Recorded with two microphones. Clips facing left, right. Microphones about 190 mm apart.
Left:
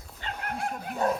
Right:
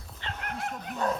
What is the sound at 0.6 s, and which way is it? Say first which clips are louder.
Dog: left 3 dB; 35° left (ahead or behind).